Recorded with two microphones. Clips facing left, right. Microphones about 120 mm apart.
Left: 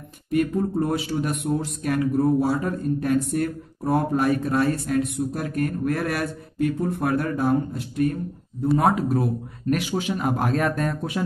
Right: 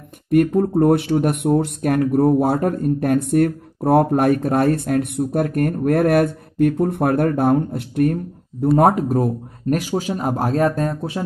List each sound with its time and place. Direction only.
0.3 s a man's voice: 60° right (ahead or behind); by 11.2 s 30° right (ahead or behind)